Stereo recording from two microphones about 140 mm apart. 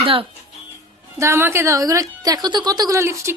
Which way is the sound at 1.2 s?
20° right (ahead or behind).